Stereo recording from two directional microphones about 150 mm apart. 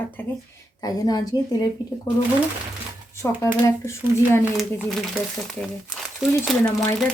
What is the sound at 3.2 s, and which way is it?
Speech, 20° left (ahead or behind).